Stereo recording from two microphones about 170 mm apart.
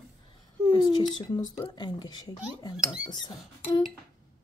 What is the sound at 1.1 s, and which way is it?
Speech, 25° left (ahead or behind).